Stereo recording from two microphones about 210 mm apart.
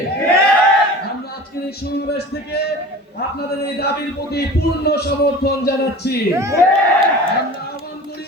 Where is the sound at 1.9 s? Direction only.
50° left (ahead or behind).